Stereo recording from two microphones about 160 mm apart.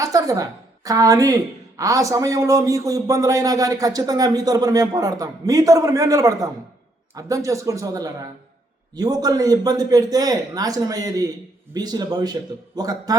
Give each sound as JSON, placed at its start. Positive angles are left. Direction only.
{"t": 0.0, "sound": "music", "side_deg": -20}
{"t": 0.9, "sound": "speech", "side_deg": -20}